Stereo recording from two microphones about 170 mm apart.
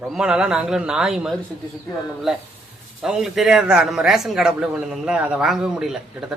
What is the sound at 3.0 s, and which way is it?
A man's voice, centre (ahead or behind).